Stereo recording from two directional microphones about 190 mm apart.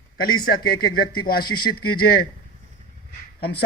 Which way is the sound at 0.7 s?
55° left (ahead or behind).